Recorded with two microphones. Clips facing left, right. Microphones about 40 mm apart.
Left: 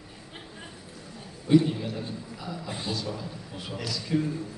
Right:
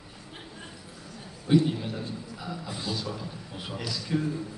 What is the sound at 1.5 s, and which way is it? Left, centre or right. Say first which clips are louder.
A man's voice: left 2 dB; centre.